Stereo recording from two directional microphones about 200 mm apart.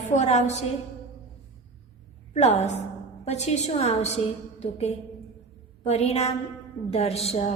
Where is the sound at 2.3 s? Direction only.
35° left (ahead or behind).